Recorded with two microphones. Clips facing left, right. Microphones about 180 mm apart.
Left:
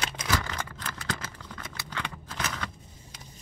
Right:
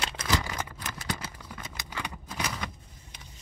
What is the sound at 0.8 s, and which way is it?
Scissors, 15° right (ahead or behind).